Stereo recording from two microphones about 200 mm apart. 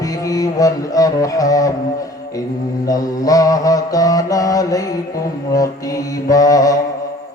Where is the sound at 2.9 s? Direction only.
15° left (ahead or behind).